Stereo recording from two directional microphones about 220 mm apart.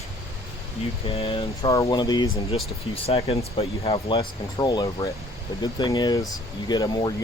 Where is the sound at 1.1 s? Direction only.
25° left (ahead or behind).